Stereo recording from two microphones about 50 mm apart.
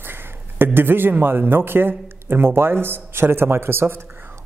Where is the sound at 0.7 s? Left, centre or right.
Right.